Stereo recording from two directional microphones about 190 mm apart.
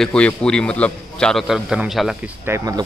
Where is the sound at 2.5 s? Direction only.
20° right (ahead or behind).